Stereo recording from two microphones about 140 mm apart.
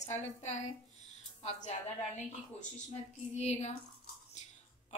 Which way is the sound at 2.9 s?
55° left (ahead or behind).